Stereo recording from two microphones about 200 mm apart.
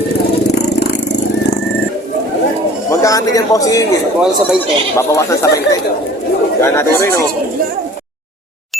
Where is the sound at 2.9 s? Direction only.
15° left (ahead or behind).